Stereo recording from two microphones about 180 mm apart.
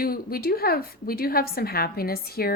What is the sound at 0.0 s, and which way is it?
Speech, 55° left (ahead or behind).